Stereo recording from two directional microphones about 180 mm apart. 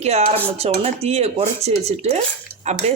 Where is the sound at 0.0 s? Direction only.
35° right (ahead or behind).